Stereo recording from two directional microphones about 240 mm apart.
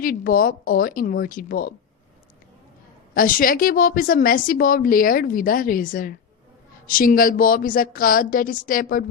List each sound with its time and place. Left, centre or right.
0.0 s a woman's voice: left
3.2 s a woman's voice: left